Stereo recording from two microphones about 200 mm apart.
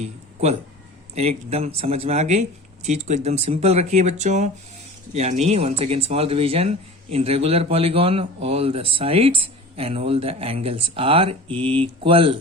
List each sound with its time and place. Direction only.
1.1 s speech: 30° right (ahead or behind)